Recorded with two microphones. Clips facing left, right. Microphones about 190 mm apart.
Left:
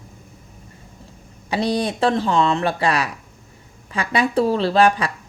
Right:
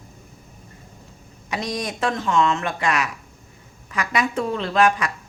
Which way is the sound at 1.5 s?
30° left (ahead or behind).